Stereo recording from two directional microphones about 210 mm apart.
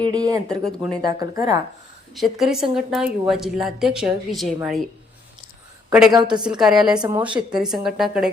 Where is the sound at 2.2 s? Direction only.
Centre (ahead or behind).